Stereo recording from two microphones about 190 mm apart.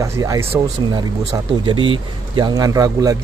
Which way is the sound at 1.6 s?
25° right (ahead or behind).